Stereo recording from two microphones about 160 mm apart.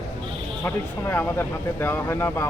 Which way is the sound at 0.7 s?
15° left (ahead or behind).